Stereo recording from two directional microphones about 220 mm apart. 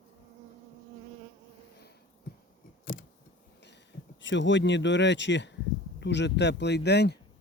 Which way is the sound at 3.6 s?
50° left (ahead or behind).